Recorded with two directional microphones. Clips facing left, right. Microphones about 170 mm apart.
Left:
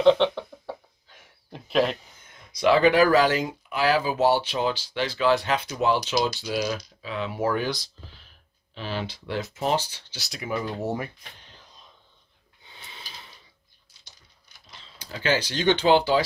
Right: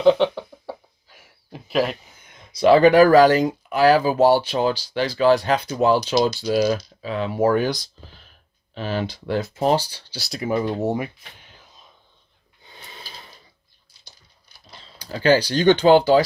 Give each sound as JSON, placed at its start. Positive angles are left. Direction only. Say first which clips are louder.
{"t": 0.0, "sound": "a sound", "louder": "right 2 dB", "side_deg": -5}
{"t": 2.6, "sound": "speech", "louder": "right 6 dB", "side_deg": -40}
{"t": 10.8, "sound": "speech", "louder": "right 6 dB", "side_deg": -15}
{"t": 12.6, "sound": "snort", "louder": "right 4 dB", "side_deg": -40}
{"t": 14.0, "sound": "typing", "louder": "right 3 dB", "side_deg": -35}